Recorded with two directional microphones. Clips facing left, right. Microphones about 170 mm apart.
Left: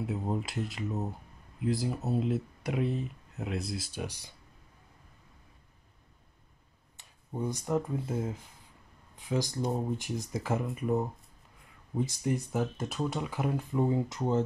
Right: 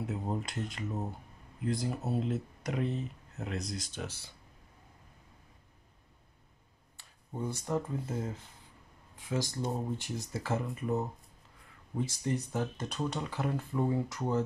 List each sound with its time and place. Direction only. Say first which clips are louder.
0.0 s speech: left 2 dB; 5° left (ahead or behind)
7.0 s a sound: left 3 dB; 15° left (ahead or behind)
9.1 s speech: left 3 dB; 15° left (ahead or behind)
12.7 s speech: left 2 dB; 5° left (ahead or behind); by 14.4 s 20° left (ahead or behind)